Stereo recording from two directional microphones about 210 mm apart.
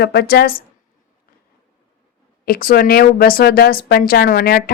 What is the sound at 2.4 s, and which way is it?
A woman's voice, 45° left (ahead or behind).